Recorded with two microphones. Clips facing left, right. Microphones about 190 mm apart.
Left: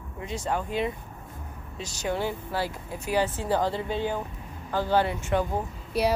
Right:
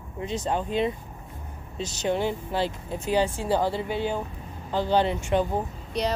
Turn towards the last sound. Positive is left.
turn(degrees=5)  # may be behind; listen again after turning